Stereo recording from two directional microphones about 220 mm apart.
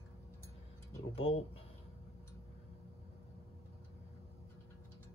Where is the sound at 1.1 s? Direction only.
25° left (ahead or behind).